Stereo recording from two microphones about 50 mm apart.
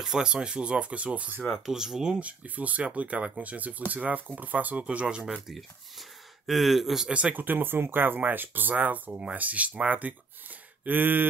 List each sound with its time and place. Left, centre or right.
0.0 s speech: centre
1.5 s speech: centre
2.1 s speech: right
5.5 s speech: centre
7.1 s speech: right
7.3 s speech: right